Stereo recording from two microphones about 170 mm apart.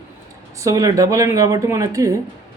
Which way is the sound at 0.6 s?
20° right (ahead or behind).